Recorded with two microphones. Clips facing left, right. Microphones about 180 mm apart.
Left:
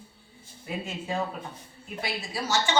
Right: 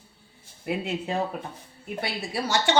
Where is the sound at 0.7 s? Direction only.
65° right (ahead or behind).